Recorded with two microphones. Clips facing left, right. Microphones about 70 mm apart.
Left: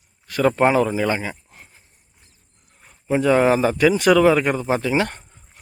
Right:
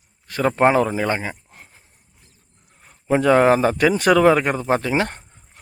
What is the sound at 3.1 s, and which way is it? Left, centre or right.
Speech, right.